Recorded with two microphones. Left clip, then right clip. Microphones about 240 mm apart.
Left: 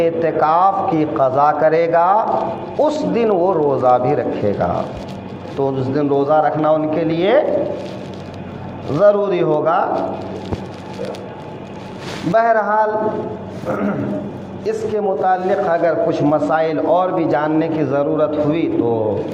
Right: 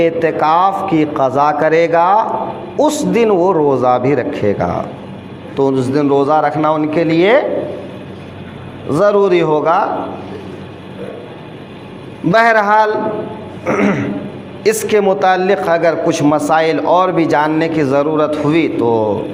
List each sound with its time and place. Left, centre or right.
0.0 s a man's voice: right
8.9 s a man's voice: right
12.3 s a man's voice: right